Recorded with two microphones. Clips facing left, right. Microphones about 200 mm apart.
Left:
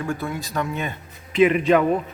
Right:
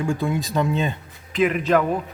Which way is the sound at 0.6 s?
30° right (ahead or behind).